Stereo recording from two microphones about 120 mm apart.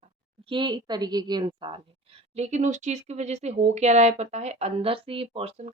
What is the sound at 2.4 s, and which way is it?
A woman's voice, 75° right (ahead or behind).